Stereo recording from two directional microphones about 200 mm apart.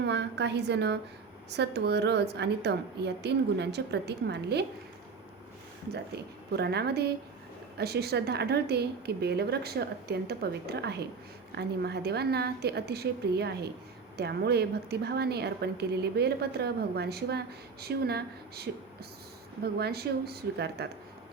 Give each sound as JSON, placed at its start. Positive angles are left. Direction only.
{"t": 0.0, "sound": "a woman's voice", "side_deg": -60}
{"t": 6.6, "sound": "a woman's voice", "side_deg": -55}
{"t": 19.8, "sound": "a woman's voice", "side_deg": -55}